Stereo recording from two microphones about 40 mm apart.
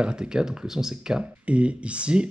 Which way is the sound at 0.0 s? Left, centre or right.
Centre.